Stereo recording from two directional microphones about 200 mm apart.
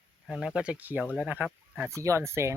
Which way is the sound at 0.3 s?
5° right (ahead or behind).